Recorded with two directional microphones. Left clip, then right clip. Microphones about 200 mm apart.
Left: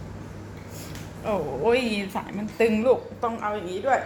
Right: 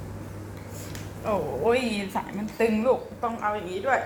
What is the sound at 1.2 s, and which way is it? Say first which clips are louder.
Speech: left 1 dB; 25° left (ahead or behind).